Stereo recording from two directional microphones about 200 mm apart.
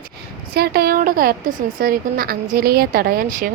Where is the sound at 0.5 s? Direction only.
50° right (ahead or behind).